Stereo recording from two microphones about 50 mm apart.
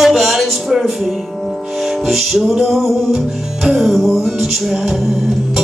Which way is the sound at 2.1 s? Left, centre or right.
Centre.